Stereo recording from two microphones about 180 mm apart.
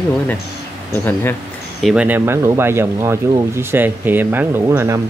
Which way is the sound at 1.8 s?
5° right (ahead or behind).